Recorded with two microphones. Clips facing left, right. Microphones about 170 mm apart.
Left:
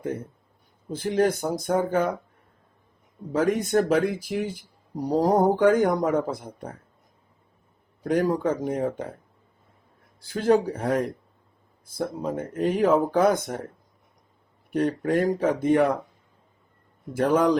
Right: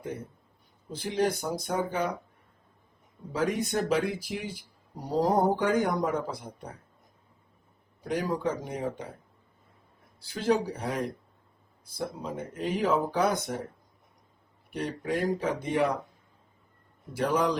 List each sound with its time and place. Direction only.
0.9 s speech: 50° left (ahead or behind)
3.3 s speech: 50° left (ahead or behind)
8.0 s speech: 50° left (ahead or behind)
10.2 s speech: 50° left (ahead or behind)
14.7 s speech: 45° left (ahead or behind)
17.2 s speech: 50° left (ahead or behind)